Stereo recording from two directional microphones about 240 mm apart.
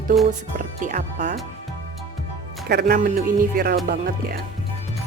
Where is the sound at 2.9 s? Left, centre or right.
Right.